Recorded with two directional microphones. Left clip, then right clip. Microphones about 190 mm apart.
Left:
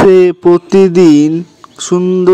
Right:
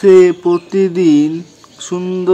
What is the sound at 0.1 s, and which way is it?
Mantra, 45° left (ahead or behind).